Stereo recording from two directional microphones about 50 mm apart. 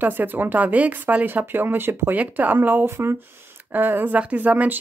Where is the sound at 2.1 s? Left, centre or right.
Right.